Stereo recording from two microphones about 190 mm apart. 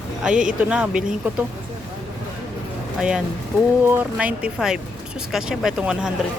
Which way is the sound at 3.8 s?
10° right (ahead or behind).